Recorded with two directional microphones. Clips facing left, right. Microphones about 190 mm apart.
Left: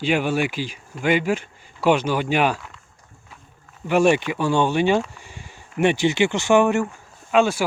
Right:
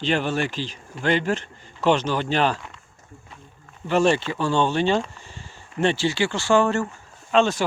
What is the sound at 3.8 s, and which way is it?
Speech, 10° left (ahead or behind).